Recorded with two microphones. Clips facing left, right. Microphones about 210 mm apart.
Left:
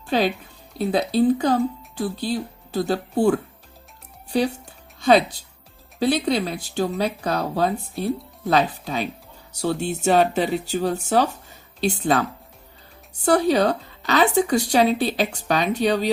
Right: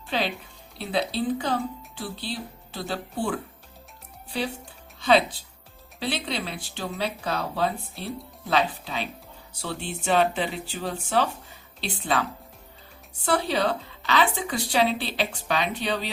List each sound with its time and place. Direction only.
0.1 s speech: 45° left (ahead or behind)
4.9 s speech: 45° left (ahead or behind)
13.2 s speech: 45° left (ahead or behind)